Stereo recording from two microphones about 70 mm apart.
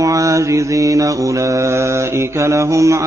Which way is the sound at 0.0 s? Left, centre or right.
Right.